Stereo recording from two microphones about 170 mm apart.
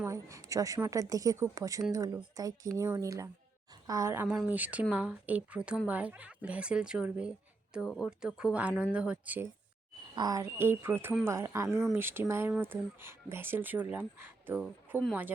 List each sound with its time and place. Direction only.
0.0 s a woman's voice: 20° right (ahead or behind)
10.2 s speech: 20° right (ahead or behind)